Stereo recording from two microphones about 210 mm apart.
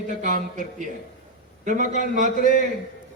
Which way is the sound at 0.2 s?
35° right (ahead or behind).